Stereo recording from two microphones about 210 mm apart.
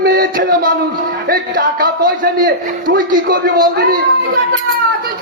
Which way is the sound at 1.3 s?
45° right (ahead or behind).